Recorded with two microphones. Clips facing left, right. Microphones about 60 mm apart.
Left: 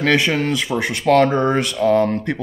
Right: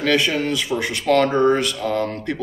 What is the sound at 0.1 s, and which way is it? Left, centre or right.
Speech, left.